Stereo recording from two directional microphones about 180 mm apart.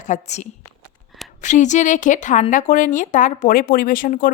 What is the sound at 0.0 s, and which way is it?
A woman's voice, 40° left (ahead or behind).